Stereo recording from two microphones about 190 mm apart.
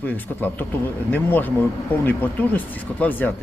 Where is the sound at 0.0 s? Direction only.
10° left (ahead or behind).